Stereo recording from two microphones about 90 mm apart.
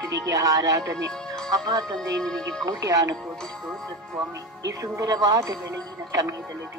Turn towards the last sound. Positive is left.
turn(degrees=-40)  # may be behind; listen again after turning